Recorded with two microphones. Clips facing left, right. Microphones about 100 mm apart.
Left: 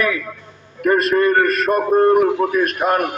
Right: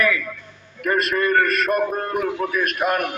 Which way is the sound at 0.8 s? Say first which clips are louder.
Left 6 dB; 30° left (ahead or behind).